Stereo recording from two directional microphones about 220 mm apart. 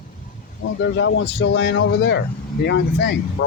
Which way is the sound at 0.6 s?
60° left (ahead or behind).